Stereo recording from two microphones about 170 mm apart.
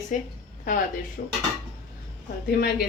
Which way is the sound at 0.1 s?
45° left (ahead or behind).